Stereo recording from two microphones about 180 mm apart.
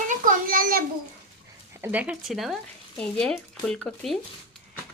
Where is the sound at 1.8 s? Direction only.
10° right (ahead or behind).